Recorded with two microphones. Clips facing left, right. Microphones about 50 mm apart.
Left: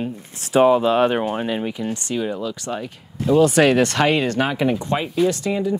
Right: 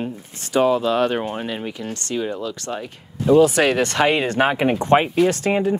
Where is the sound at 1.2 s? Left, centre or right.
Centre.